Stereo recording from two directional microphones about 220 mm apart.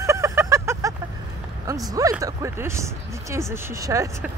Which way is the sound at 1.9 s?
15° right (ahead or behind).